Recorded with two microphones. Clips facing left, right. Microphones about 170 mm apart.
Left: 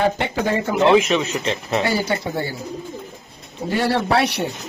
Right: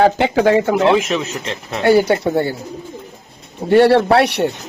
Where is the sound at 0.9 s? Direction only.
Centre (ahead or behind).